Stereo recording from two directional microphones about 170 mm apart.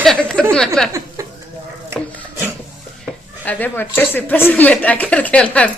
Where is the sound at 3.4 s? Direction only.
10° left (ahead or behind).